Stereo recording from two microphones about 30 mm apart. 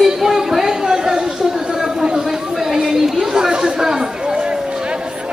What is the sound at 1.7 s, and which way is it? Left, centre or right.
Chatter, centre.